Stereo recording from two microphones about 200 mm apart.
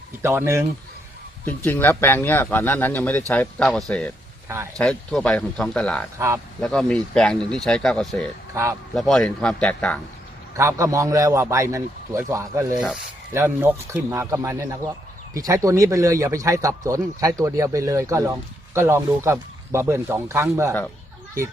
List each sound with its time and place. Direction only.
0.2 s speech: 10° right (ahead or behind)
1.5 s speech: 10° left (ahead or behind)
4.4 s speech: 15° right (ahead or behind)
4.8 s speech: 5° left (ahead or behind)
6.1 s speech: 15° right (ahead or behind)
6.6 s speech: 5° left (ahead or behind)
10.6 s speech: 15° right (ahead or behind)